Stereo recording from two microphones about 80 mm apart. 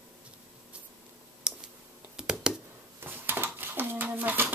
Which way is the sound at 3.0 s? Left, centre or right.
Right.